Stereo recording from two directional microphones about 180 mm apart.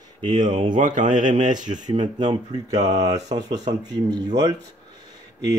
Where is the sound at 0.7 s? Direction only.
45° right (ahead or behind).